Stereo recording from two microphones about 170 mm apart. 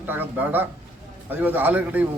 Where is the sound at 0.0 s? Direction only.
10° right (ahead or behind).